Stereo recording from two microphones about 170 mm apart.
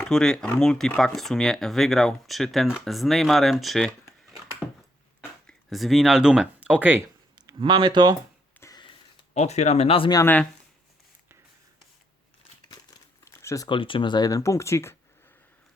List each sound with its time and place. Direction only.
0.0 s speech: 5° left (ahead or behind)
4.6 s a sound: 15° left (ahead or behind)
5.5 s speech: centre (ahead or behind)
7.3 s speech: 25° right (ahead or behind)
8.6 s a sound: 25° left (ahead or behind)
9.3 s speech: 40° left (ahead or behind)
10.2 s speech: 10° left (ahead or behind)
13.2 s a sound: 15° left (ahead or behind)
13.7 s speech: 30° left (ahead or behind)